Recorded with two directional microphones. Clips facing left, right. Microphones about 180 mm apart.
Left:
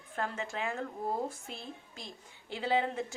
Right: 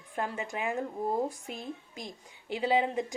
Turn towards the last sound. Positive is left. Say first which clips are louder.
# right 3 dB
turn(degrees=-15)  # may be behind; listen again after turning